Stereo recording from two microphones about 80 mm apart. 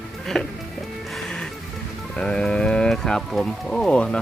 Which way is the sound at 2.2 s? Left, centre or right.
Centre.